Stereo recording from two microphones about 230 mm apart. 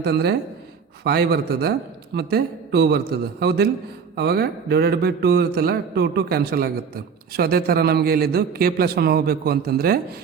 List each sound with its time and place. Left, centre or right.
0.0 s speech: right